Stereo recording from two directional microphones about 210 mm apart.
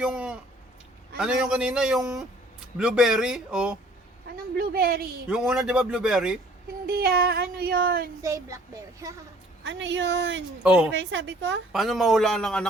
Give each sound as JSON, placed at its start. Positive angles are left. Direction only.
{"t": 0.0, "sound": "a sound", "side_deg": -5}
{"t": 1.2, "sound": "a man's voice", "side_deg": -5}
{"t": 4.5, "sound": "a sound", "side_deg": -45}
{"t": 5.3, "sound": "a man's voice", "side_deg": 0}
{"t": 6.8, "sound": "a sound", "side_deg": -45}
{"t": 8.2, "sound": "a child's voice", "side_deg": -15}
{"t": 9.6, "sound": "speech", "side_deg": -60}
{"t": 10.6, "sound": "a man's voice", "side_deg": -5}
{"t": 10.9, "sound": "speech", "side_deg": -60}
{"t": 11.7, "sound": "a man's voice", "side_deg": 0}